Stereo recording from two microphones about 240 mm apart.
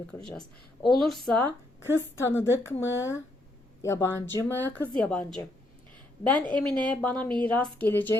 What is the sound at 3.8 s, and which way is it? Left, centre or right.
Speech, centre.